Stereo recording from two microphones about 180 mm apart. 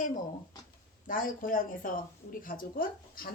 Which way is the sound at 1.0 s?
50° left (ahead or behind).